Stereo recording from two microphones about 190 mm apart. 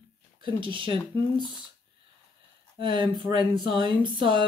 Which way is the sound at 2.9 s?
25° right (ahead or behind).